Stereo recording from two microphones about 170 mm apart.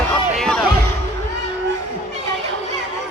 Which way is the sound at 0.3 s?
5° left (ahead or behind).